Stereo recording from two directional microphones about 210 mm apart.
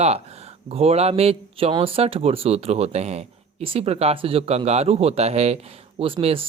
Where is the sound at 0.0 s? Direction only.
30° right (ahead or behind).